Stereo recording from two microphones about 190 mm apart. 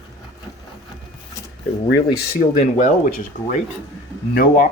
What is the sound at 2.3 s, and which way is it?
Speech, 45° left (ahead or behind).